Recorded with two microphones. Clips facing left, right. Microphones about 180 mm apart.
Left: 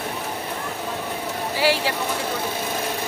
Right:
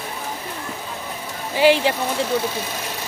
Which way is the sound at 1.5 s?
20° right (ahead or behind).